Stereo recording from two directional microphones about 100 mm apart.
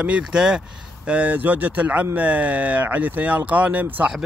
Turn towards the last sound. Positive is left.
turn(degrees=-15)  # may be behind; listen again after turning